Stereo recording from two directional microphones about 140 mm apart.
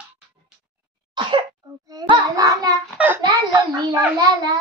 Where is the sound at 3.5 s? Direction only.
30° right (ahead or behind).